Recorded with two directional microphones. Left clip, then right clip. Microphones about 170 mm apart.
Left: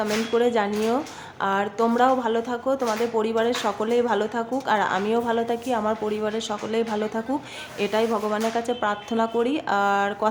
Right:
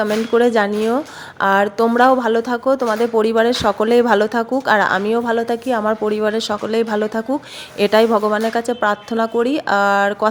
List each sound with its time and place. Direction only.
0.0 s a woman's voice: 35° right (ahead or behind)